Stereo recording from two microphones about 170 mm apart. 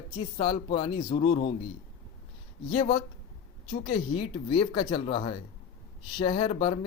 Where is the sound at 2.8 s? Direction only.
30° left (ahead or behind).